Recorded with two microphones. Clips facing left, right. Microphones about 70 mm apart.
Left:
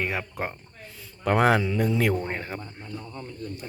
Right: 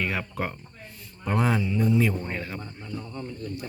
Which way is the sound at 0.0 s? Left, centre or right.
Centre.